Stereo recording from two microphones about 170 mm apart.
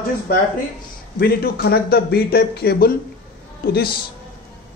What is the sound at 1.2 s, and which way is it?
A man's voice, 65° left (ahead or behind).